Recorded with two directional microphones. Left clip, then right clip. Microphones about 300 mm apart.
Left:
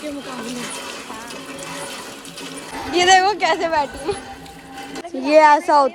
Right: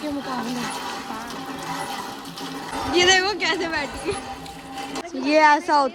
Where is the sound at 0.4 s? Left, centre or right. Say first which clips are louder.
Right 1 dB; centre.